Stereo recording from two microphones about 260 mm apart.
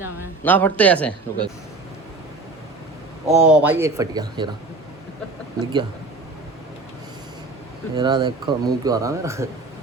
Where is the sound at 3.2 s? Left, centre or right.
Centre.